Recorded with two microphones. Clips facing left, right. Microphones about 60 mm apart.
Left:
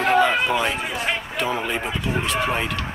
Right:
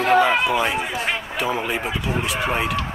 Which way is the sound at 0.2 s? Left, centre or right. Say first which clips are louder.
Right 1 dB; centre.